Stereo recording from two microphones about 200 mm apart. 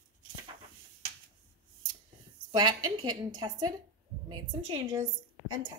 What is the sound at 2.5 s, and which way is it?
A woman's voice, 20° right (ahead or behind).